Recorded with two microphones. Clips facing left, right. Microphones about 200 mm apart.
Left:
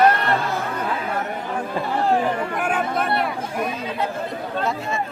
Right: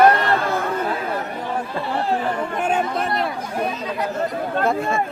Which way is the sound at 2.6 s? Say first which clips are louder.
Right 6 dB; 25° right (ahead or behind).